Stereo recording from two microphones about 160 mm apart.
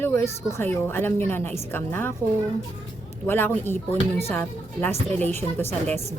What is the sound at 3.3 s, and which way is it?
A woman's voice, 15° left (ahead or behind).